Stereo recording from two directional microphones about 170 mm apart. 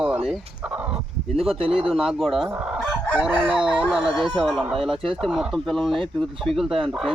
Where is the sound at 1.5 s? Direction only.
35° right (ahead or behind).